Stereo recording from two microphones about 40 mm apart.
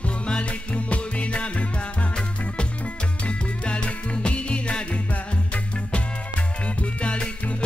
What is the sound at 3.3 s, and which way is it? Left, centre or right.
Music, left.